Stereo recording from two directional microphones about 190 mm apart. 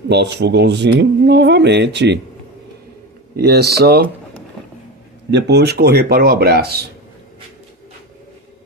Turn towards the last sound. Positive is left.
turn(degrees=-55)  # may be behind; listen again after turning